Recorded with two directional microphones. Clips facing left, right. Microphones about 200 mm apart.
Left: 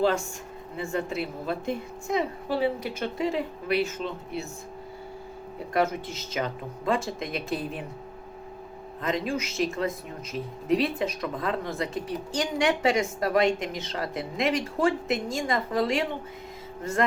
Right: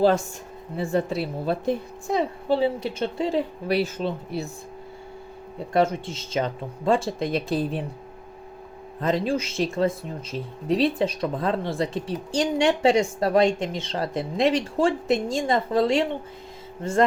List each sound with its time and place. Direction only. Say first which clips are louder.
0.8 s a woman's voice: right 5 dB; 35° right (ahead or behind)
5.7 s a woman's voice: right 4 dB; 30° right (ahead or behind)
9.0 s a woman's voice: right 5 dB; 35° right (ahead or behind)